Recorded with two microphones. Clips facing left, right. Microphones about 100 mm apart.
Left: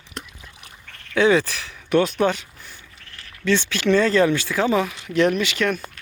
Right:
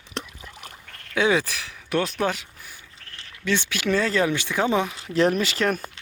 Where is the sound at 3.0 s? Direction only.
25° right (ahead or behind).